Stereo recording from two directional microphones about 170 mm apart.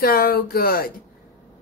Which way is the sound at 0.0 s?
60° left (ahead or behind).